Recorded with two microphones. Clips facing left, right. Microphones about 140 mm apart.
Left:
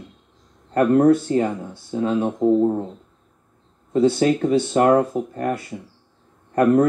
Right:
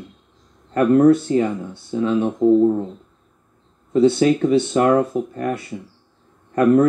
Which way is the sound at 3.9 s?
40° left (ahead or behind).